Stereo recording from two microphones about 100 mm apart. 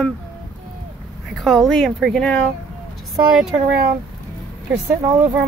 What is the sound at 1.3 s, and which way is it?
Speech, centre (ahead or behind).